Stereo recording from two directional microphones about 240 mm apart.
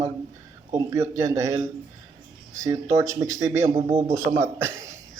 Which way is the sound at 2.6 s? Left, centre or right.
Centre.